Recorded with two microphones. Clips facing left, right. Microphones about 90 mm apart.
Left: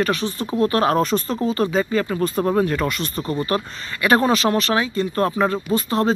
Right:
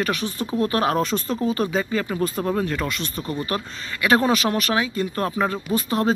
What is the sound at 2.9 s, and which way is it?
Speech, 40° left (ahead or behind).